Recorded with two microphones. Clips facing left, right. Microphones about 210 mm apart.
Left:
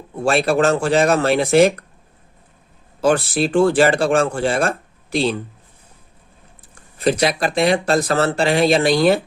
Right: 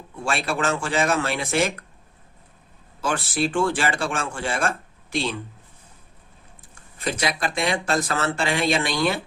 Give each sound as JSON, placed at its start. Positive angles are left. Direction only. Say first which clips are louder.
{"t": 0.3, "sound": "speech", "louder": "left 9 dB", "side_deg": 40}
{"t": 3.0, "sound": "speech", "louder": "left 8 dB", "side_deg": 40}
{"t": 6.7, "sound": "speech", "louder": "left 10 dB", "side_deg": 35}